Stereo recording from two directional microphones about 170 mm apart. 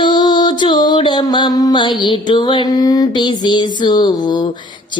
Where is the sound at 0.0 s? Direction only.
25° left (ahead or behind).